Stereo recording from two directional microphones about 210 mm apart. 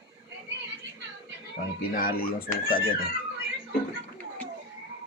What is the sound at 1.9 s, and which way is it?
Speech, 45° left (ahead or behind).